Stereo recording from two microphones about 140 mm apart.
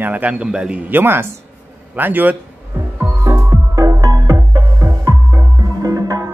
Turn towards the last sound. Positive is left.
turn(degrees=-25)  # may be behind; listen again after turning